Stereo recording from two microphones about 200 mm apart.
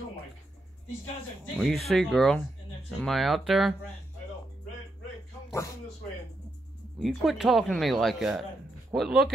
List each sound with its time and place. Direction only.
1.4 s speech: centre (ahead or behind)
7.0 s speech: centre (ahead or behind)